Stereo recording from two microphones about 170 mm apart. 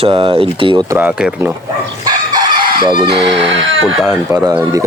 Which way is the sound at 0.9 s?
10° right (ahead or behind).